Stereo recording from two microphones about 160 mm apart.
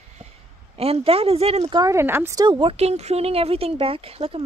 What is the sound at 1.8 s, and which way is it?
Speech, 15° right (ahead or behind).